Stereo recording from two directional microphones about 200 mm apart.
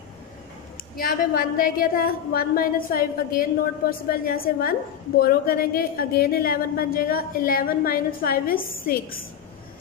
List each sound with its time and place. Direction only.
0.9 s a woman's voice: 50° left (ahead or behind)